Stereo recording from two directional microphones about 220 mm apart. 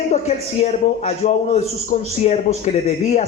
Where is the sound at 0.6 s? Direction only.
30° left (ahead or behind).